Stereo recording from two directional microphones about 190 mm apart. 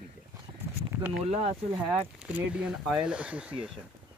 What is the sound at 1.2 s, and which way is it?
Speech, 30° right (ahead or behind).